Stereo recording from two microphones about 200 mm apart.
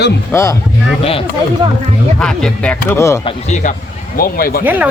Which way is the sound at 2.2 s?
5° left (ahead or behind).